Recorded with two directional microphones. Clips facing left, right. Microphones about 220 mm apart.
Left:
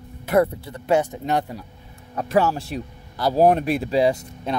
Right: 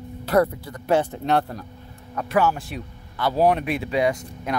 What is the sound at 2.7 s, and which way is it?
Speech, 40° left (ahead or behind).